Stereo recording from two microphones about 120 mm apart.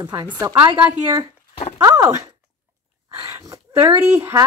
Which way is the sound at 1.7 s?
25° right (ahead or behind).